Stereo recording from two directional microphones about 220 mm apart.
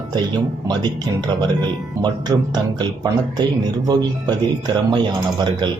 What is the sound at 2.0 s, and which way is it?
Speech, 20° right (ahead or behind).